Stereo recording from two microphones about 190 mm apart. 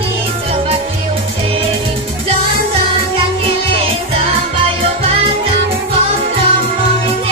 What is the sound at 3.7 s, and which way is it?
Music, 30° right (ahead or behind).